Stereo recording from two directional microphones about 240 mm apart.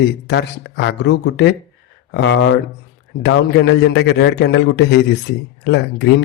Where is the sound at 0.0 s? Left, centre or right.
Left.